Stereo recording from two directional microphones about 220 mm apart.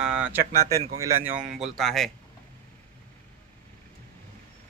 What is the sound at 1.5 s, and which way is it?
Speech, centre (ahead or behind).